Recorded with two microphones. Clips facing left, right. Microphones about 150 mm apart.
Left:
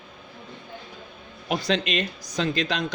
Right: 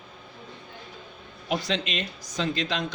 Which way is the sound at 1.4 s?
65° left (ahead or behind).